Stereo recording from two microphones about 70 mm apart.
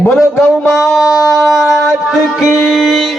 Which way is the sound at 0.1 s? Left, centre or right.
Centre.